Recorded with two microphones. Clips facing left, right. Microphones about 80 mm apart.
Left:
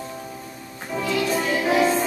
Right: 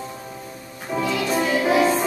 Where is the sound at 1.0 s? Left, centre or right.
Centre.